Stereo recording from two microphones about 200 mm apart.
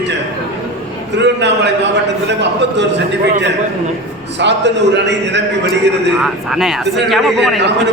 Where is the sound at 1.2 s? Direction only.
60° right (ahead or behind).